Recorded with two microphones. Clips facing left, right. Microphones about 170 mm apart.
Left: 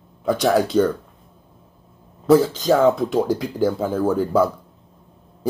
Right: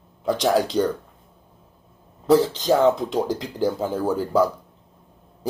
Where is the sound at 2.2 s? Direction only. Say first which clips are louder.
Left 2 dB; 15° right (ahead or behind).